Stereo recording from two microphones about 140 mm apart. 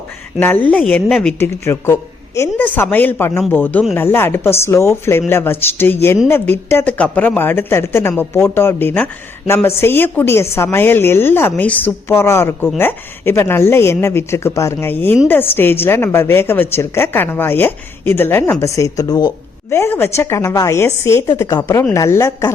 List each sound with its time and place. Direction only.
0.3 s a woman's voice: 15° left (ahead or behind)
1.4 s a woman's voice: 20° left (ahead or behind)
19.7 s a woman's voice: 20° left (ahead or behind)